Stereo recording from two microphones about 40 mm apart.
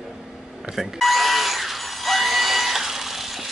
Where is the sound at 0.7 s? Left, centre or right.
Centre.